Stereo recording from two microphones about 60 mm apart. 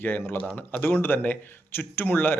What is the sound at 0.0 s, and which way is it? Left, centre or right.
Speech, left.